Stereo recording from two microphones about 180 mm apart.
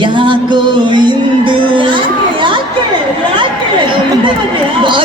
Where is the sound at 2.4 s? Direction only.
25° right (ahead or behind).